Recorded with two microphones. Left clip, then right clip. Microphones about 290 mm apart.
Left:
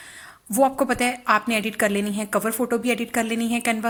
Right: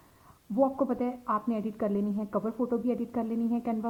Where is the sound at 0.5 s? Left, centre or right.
Left.